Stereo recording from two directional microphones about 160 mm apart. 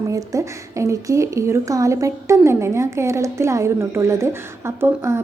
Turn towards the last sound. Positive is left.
turn(degrees=-15)  # may be behind; listen again after turning